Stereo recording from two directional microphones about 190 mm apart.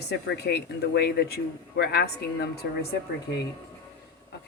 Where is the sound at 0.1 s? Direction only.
60° left (ahead or behind).